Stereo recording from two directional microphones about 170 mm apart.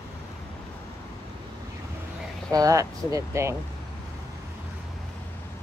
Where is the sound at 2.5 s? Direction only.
20° right (ahead or behind).